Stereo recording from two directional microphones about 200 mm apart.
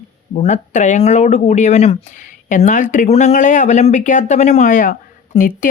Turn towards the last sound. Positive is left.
turn(degrees=40)  # may be behind; listen again after turning